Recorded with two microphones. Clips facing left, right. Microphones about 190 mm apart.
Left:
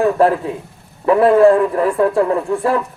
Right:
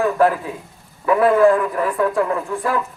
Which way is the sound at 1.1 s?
30° left (ahead or behind).